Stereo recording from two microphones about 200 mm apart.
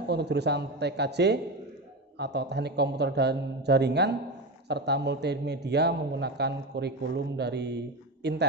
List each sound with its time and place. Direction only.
0.1 s a man's voice: 55° right (ahead or behind)